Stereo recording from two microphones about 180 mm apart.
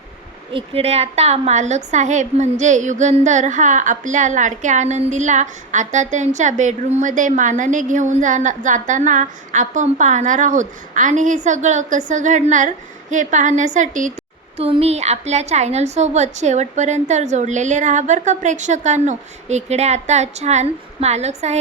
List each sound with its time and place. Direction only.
0.5 s a woman's voice: 35° right (ahead or behind)
14.6 s a woman's voice: 35° right (ahead or behind)